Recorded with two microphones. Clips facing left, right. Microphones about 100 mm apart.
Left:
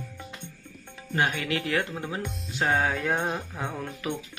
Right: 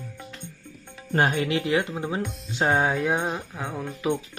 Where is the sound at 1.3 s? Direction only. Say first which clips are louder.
Right 4 dB; 25° right (ahead or behind).